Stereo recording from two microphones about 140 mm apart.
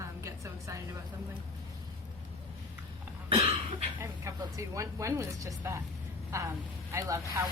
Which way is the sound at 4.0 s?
20° right (ahead or behind).